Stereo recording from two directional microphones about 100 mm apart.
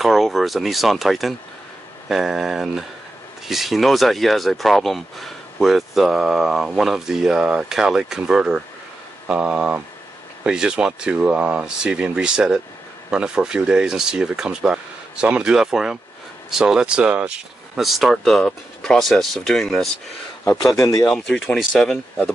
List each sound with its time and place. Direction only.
0.0 s speech: centre (ahead or behind)
17.7 s speech: centre (ahead or behind)
20.8 s speech: 30° left (ahead or behind)
21.1 s speech: 5° left (ahead or behind)